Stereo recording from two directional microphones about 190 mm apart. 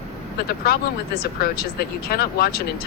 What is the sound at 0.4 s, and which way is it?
Speech, 55° left (ahead or behind).